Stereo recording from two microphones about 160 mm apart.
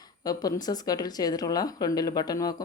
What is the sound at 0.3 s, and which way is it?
Speech, 25° left (ahead or behind).